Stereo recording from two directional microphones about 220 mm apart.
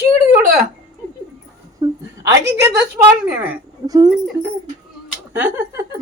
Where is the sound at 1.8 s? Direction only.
15° right (ahead or behind).